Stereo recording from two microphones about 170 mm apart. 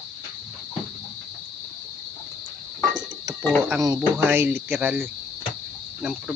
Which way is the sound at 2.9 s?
25° right (ahead or behind).